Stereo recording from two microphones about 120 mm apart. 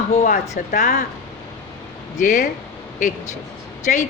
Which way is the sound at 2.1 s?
90° left.